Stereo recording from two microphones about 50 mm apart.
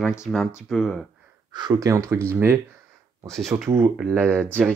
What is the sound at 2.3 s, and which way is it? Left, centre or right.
Speech, right.